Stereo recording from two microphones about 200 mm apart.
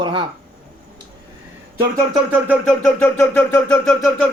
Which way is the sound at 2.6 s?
5° left (ahead or behind).